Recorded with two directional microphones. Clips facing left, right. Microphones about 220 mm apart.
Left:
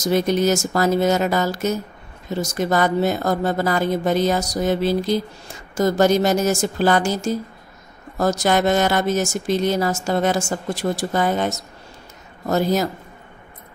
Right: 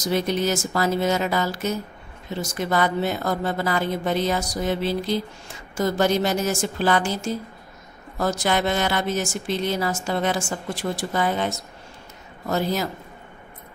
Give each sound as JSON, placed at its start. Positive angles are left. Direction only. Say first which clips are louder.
{"t": 0.0, "sound": "a woman's voice", "louder": "left 5 dB", "side_deg": 45}